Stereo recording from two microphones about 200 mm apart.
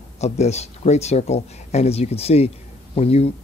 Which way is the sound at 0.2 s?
35° left (ahead or behind).